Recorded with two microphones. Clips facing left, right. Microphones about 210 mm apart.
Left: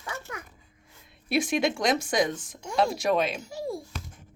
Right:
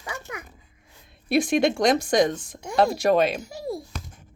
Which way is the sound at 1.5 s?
55° right (ahead or behind).